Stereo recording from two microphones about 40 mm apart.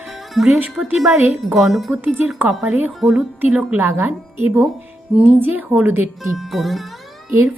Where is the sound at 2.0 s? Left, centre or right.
Right.